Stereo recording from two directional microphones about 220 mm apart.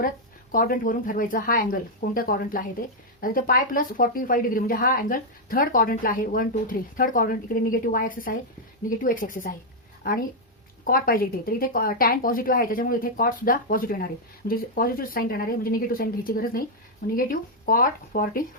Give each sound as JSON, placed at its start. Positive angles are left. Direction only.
{"t": 0.5, "sound": "speech", "side_deg": 40}
{"t": 10.8, "sound": "speech", "side_deg": 40}